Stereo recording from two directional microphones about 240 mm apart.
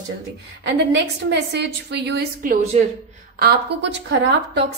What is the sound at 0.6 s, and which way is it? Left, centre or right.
A woman's voice, right.